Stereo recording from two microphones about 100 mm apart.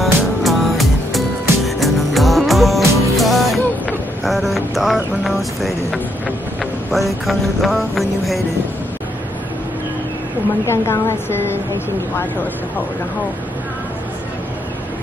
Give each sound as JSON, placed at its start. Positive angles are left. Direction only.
{"t": 0.0, "sound": "music", "side_deg": 0}
{"t": 4.2, "sound": "vehicle", "side_deg": 0}
{"t": 6.6, "sound": "music", "side_deg": 0}
{"t": 10.7, "sound": "a woman's voice", "side_deg": 25}